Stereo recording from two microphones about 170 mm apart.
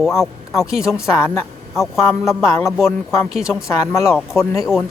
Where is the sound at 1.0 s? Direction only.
15° left (ahead or behind).